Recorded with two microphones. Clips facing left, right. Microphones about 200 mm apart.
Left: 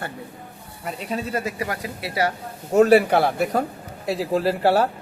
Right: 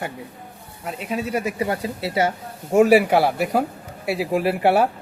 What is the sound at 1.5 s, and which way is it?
Speech, 25° right (ahead or behind).